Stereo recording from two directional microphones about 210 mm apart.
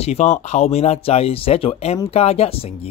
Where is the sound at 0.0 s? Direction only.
30° left (ahead or behind).